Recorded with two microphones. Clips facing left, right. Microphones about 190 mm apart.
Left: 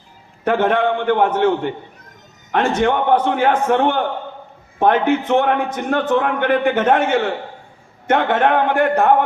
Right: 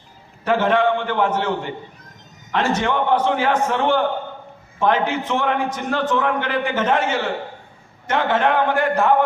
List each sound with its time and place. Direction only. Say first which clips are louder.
0.4 s a man's voice: left 1 dB; 55° left (ahead or behind)